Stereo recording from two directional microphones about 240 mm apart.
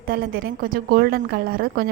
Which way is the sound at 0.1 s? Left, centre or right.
Right.